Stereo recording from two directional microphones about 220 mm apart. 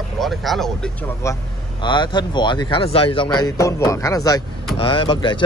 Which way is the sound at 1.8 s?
20° left (ahead or behind).